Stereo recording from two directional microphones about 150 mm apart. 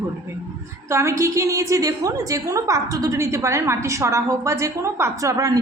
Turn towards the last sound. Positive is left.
turn(degrees=-20)  # may be behind; listen again after turning